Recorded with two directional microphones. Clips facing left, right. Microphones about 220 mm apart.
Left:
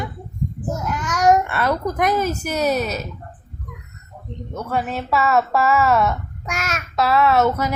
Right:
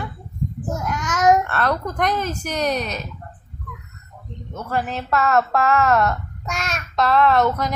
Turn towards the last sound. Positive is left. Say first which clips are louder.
# left 1 dB
turn(degrees=5)  # may be behind; listen again after turning